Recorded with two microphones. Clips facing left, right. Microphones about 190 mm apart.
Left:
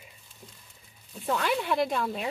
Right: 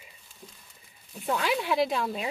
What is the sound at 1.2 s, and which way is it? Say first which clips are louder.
Speech: even; 10° right (ahead or behind).